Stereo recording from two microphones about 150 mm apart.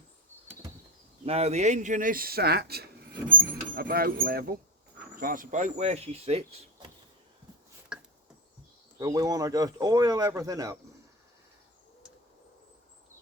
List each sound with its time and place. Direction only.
1.2 s speech: 45° right (ahead or behind); by 4.6 s 90° right
5.1 s speech: 65° right (ahead or behind); by 6.7 s 45° right (ahead or behind)
7.9 s a sound: 5° right (ahead or behind)
9.0 s speech: 25° right (ahead or behind)